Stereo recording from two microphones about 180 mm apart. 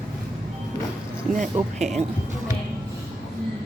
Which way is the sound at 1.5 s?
40° right (ahead or behind).